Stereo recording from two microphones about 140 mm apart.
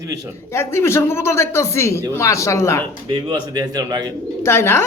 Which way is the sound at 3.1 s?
35° right (ahead or behind).